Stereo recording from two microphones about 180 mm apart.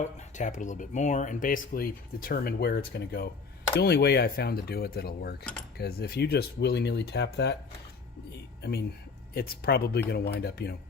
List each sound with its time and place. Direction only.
0.0 s speech: 45° left (ahead or behind); by 7.5 s 70° left (ahead or behind)
9.3 s speech: 60° left (ahead or behind)